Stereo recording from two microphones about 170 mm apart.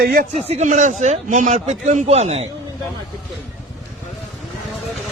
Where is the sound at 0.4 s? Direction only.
40° right (ahead or behind).